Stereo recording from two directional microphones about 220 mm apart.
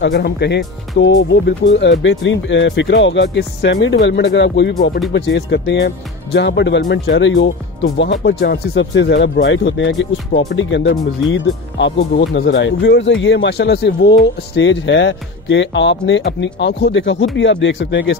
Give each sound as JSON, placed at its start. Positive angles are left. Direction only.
{"t": 0.0, "sound": "speech", "side_deg": 50}